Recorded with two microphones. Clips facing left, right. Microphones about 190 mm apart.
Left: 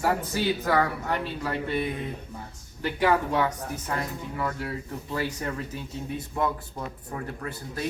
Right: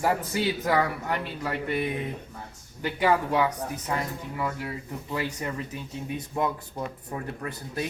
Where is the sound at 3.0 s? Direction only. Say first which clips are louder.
Even; 15° right (ahead or behind).